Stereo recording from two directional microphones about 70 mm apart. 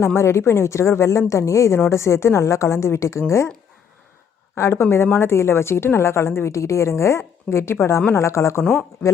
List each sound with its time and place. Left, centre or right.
0.0 s a woman's voice: left
4.5 s a woman's voice: left